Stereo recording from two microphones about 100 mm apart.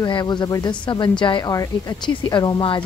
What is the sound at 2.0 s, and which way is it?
Speech, 50° left (ahead or behind).